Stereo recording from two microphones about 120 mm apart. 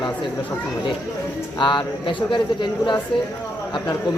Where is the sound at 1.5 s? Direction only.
40° left (ahead or behind).